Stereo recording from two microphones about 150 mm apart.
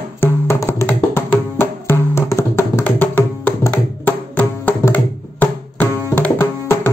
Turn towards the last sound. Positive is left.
turn(degrees=15)  # may be behind; listen again after turning